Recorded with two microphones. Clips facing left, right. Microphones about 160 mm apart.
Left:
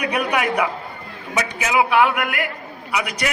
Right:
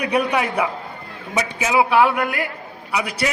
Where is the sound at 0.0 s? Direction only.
30° right (ahead or behind).